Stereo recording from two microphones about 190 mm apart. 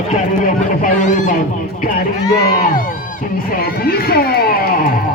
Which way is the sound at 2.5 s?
45° left (ahead or behind).